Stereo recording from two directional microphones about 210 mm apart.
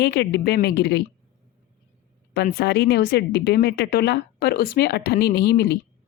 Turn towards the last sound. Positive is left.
turn(degrees=50)  # may be behind; listen again after turning